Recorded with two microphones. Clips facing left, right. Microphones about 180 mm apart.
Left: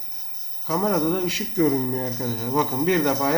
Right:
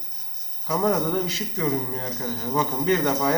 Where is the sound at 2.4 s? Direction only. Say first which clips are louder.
Left 3 dB; 5° left (ahead or behind).